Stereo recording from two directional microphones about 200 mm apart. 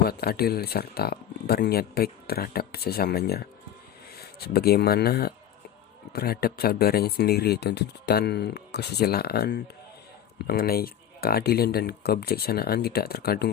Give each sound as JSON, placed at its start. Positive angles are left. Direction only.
{"t": 0.0, "sound": "speech", "side_deg": 50}